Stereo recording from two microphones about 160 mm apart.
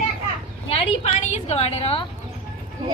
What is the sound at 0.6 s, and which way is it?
Speech, 35° left (ahead or behind).